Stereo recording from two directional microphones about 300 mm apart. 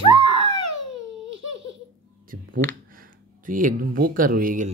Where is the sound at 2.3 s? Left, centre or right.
Right.